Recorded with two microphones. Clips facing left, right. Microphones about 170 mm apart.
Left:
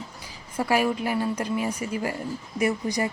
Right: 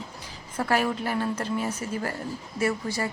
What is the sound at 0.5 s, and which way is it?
Speech, 10° left (ahead or behind).